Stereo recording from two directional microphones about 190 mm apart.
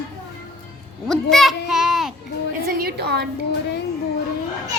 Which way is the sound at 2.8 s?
55° right (ahead or behind).